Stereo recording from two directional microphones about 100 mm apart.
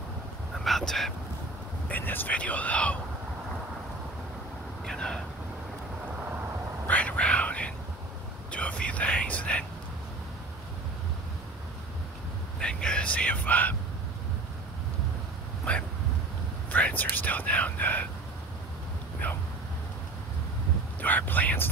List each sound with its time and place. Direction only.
0.7 s a sound: centre (ahead or behind)
1.9 s speech: 20° left (ahead or behind)
4.8 s speech: 5° left (ahead or behind)
6.9 s whispering: 15° left (ahead or behind)
12.5 s whispering: 10° left (ahead or behind)
15.7 s a sound: 15° left (ahead or behind)
16.7 s whispering: 15° left (ahead or behind)
19.2 s a sound: 15° left (ahead or behind)
21.0 s whispering: 15° left (ahead or behind)